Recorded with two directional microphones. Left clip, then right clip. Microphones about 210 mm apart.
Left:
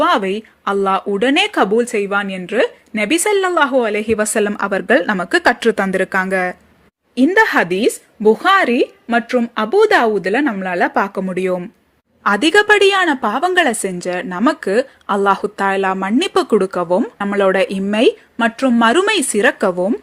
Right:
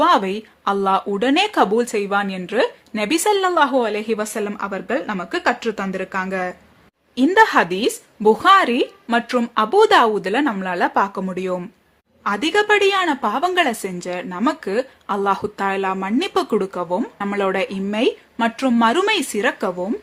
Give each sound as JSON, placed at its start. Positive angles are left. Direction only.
{"t": 0.0, "sound": "speech", "side_deg": 10}
{"t": 7.3, "sound": "speech", "side_deg": 10}
{"t": 12.2, "sound": "a woman's voice", "side_deg": 25}